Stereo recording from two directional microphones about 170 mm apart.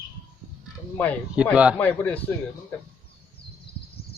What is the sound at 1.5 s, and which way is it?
Speech, 5° right (ahead or behind).